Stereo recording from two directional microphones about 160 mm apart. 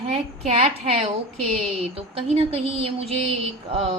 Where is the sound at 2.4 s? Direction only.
35° right (ahead or behind).